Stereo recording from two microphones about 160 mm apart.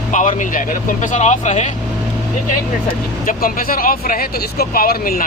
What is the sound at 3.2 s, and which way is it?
Speech, 65° left (ahead or behind).